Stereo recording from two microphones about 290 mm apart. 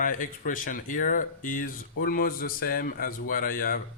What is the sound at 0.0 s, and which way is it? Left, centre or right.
Speech, left.